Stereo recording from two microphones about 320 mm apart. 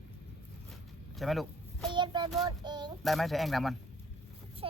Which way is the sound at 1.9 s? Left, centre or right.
Centre.